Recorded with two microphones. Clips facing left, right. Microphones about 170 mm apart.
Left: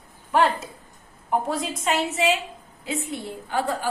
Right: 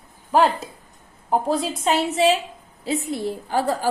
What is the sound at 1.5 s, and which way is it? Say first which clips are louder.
A woman's voice: right 4 dB; 30° right (ahead or behind).